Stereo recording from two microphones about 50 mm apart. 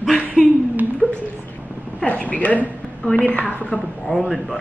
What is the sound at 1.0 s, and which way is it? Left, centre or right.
A woman's voice, left.